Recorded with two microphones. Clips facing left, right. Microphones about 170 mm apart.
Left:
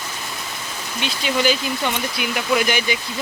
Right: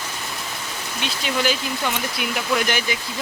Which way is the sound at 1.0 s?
Centre (ahead or behind).